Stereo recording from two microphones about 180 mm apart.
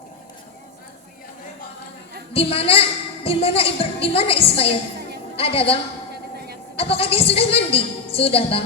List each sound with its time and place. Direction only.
2.3 s a woman's voice: 35° left (ahead or behind)